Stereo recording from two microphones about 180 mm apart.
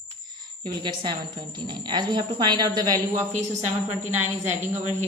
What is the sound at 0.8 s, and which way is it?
A woman's voice, 25° right (ahead or behind).